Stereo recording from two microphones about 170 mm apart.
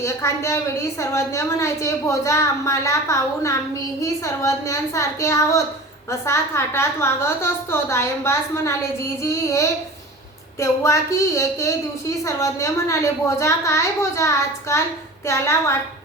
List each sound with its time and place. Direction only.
0.0 s a woman's voice: 15° left (ahead or behind)